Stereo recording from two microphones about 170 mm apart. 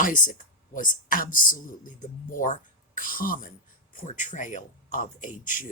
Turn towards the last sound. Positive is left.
turn(degrees=50)  # may be behind; listen again after turning